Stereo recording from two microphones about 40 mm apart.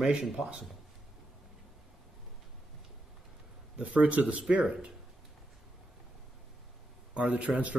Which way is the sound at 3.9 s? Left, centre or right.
Right.